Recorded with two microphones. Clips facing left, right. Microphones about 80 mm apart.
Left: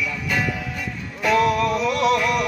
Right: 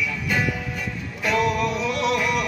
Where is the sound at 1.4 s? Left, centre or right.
Centre.